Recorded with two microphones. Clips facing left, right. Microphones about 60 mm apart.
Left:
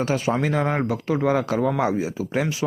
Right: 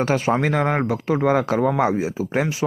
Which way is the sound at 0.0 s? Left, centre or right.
Right.